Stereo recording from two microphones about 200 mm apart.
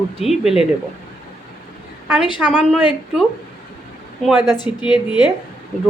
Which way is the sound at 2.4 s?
5° right (ahead or behind).